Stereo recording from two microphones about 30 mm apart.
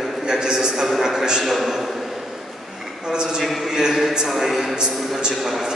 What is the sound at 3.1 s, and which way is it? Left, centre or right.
A man's voice, right.